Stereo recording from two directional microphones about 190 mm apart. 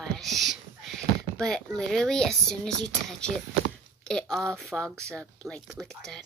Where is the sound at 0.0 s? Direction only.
Centre (ahead or behind).